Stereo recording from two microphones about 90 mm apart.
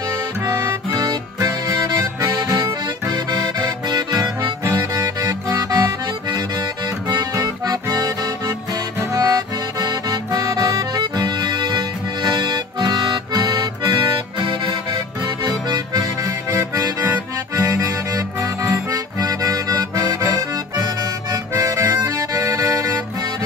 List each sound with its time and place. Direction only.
0.5 s music: 45° right (ahead or behind)
3.1 s music: 50° right (ahead or behind)
7.1 s music: 50° right (ahead or behind)
9.1 s accordion: 50° right (ahead or behind)
15.4 s music: 50° right (ahead or behind)
18.9 s accordion: 40° right (ahead or behind)
21.3 s music: 35° right (ahead or behind)